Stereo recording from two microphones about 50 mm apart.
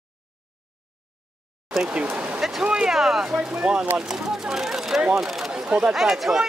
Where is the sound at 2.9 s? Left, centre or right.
Centre.